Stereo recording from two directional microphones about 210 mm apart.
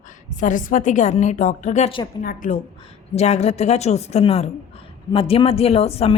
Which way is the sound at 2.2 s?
40° left (ahead or behind).